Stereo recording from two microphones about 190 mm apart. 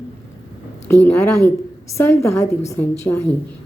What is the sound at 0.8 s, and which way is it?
A woman's voice, 10° left (ahead or behind).